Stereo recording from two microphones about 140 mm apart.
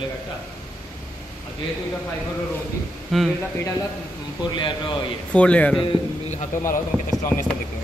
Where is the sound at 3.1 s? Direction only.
Centre (ahead or behind).